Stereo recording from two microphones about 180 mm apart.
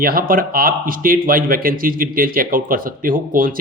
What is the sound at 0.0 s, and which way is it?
Speech, 55° right (ahead or behind).